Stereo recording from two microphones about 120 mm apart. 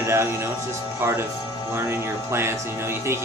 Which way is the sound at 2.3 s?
20° right (ahead or behind).